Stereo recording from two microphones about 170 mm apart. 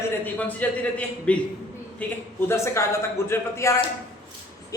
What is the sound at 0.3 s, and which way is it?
A man's voice, 10° left (ahead or behind).